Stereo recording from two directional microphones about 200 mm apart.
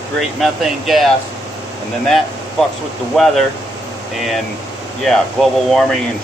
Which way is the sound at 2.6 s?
Centre (ahead or behind).